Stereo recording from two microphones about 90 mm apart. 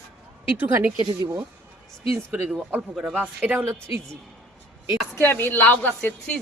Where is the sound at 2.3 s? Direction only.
10° right (ahead or behind).